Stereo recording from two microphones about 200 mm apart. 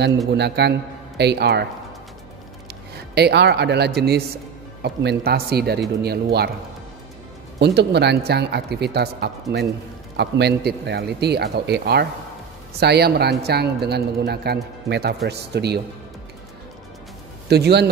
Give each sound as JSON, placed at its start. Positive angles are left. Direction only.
{"t": 0.3, "sound": "a man's voice", "side_deg": -55}
{"t": 3.2, "sound": "a man's voice", "side_deg": -55}
{"t": 7.5, "sound": "a man's voice", "side_deg": -55}
{"t": 17.5, "sound": "a man's voice", "side_deg": -55}